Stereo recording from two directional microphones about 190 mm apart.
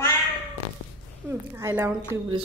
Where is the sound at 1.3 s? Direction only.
10° right (ahead or behind).